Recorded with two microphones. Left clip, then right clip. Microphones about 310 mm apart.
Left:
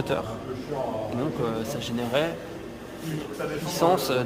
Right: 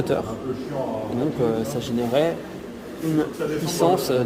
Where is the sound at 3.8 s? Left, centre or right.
Centre.